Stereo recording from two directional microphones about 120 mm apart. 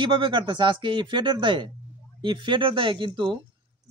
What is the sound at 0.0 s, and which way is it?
Speech, 45° right (ahead or behind).